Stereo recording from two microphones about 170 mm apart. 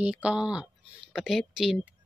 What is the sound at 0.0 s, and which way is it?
Speech, 5° right (ahead or behind).